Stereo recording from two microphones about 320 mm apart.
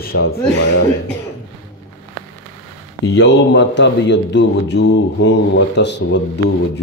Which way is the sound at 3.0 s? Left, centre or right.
Left.